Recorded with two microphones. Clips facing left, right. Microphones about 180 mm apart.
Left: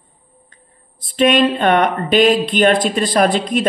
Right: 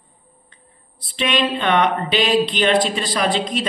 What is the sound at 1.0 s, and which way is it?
Speech, 50° left (ahead or behind).